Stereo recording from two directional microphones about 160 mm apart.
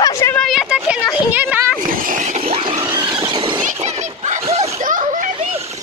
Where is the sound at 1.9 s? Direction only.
60° right (ahead or behind); by 2.8 s 35° right (ahead or behind).